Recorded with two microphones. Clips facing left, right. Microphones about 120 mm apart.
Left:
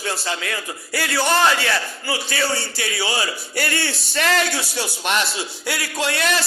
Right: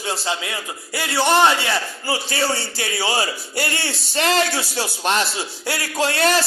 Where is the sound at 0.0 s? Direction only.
20° right (ahead or behind).